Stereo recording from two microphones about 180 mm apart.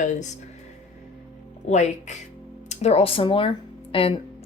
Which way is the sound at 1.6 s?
40° left (ahead or behind).